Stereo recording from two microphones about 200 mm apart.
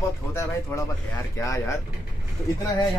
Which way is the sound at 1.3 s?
15° left (ahead or behind).